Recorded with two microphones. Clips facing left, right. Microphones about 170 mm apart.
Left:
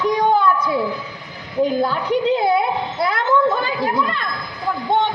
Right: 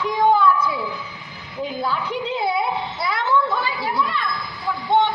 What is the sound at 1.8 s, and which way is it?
Speech, 55° left (ahead or behind).